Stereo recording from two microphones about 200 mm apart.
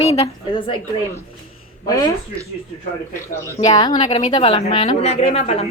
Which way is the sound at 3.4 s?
20° left (ahead or behind).